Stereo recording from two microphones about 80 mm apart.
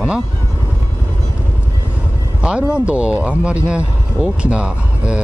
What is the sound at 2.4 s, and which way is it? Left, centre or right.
Speech, centre.